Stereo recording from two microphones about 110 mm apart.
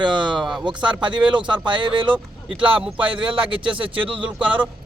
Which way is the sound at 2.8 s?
10° right (ahead or behind).